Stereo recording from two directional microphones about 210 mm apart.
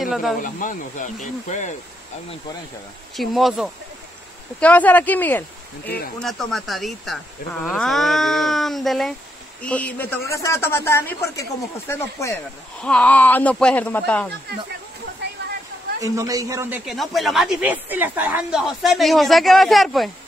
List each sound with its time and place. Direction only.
0.0 s speech: centre (ahead or behind)
0.4 s speech: 40° left (ahead or behind)
3.2 s a man's voice: centre (ahead or behind)
16.0 s a man's voice: 15° right (ahead or behind); by 20.1 s centre (ahead or behind)